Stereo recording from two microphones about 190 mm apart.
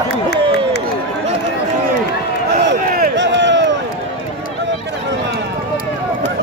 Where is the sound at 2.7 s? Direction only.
60° right (ahead or behind).